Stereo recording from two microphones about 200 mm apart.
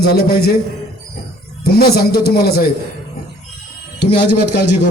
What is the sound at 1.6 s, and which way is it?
Speech, 50° left (ahead or behind).